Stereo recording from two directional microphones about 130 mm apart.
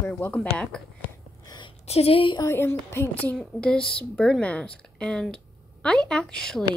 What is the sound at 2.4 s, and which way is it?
Speech, 20° left (ahead or behind).